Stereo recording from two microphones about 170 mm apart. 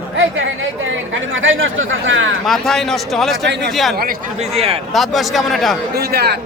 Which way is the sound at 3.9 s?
55° right (ahead or behind).